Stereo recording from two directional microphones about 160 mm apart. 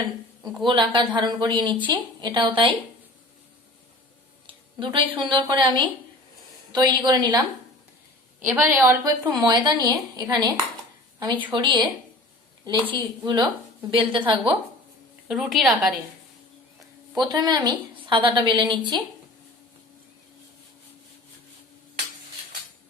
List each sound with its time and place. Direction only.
0.5 s a woman's voice: 30° right (ahead or behind)
4.4 s a woman's voice: 30° right (ahead or behind)
8.5 s a woman's voice: 15° right (ahead or behind)
11.5 s a woman's voice: 30° right (ahead or behind)
15.3 s a woman's voice: centre (ahead or behind)
17.2 s a woman's voice: 25° right (ahead or behind)